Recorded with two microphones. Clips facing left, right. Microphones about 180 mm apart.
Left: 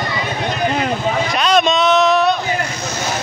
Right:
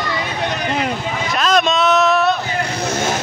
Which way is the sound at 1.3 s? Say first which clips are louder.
Even; centre (ahead or behind).